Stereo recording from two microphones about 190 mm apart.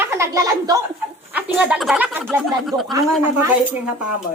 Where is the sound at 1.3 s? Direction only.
5° right (ahead or behind).